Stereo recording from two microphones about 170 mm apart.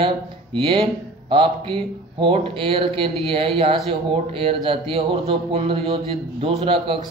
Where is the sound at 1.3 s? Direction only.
30° right (ahead or behind).